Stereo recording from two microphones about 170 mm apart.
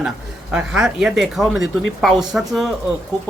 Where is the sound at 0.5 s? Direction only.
5° right (ahead or behind).